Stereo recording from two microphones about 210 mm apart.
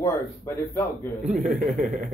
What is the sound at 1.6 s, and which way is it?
Speech, 40° right (ahead or behind).